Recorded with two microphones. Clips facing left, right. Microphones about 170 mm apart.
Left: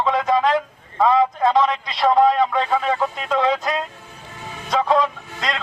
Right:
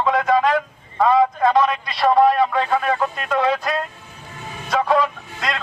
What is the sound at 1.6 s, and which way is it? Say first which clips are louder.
Speech: even; 20° left (ahead or behind).